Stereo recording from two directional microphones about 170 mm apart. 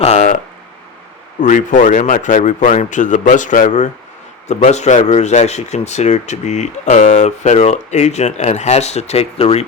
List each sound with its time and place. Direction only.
0.0 s speech: 40° left (ahead or behind)
1.4 s speech: 50° left (ahead or behind)